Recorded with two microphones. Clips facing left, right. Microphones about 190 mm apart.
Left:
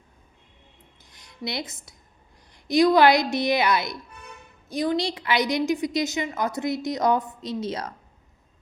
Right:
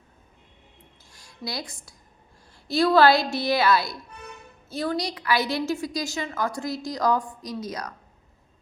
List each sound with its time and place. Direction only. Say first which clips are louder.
1.1 s a woman's voice: left 2 dB; 20° left (ahead or behind)
4.9 s a woman's voice: left 1 dB; 25° left (ahead or behind)